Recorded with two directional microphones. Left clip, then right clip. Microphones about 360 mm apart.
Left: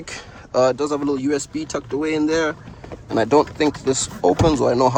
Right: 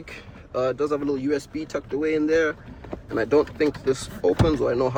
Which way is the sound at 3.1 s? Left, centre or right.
Left.